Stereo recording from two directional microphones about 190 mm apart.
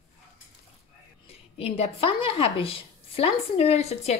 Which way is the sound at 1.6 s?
30° left (ahead or behind).